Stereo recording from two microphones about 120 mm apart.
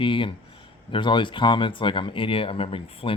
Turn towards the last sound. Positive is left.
turn(degrees=50)  # may be behind; listen again after turning